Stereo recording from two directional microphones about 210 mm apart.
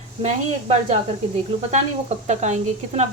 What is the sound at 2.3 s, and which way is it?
Speech, 35° right (ahead or behind).